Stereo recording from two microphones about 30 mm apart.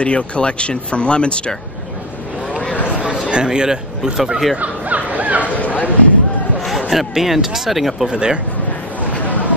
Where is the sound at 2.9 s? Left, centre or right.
Right.